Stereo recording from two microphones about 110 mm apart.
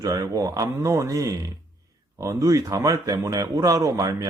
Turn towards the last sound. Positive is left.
turn(degrees=-30)  # may be behind; listen again after turning